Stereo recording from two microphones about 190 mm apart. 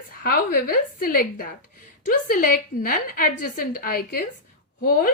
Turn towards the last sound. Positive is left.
turn(degrees=50)  # may be behind; listen again after turning